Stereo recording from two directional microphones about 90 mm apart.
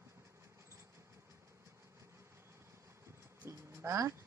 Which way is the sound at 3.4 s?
35° right (ahead or behind).